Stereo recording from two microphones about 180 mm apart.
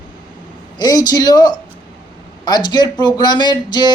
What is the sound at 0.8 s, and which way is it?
Speech, 20° left (ahead or behind).